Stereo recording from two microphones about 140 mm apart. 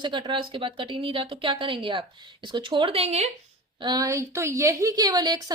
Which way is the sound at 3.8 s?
25° right (ahead or behind).